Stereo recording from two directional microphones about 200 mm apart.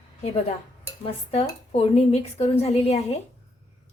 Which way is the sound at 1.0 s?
30° left (ahead or behind).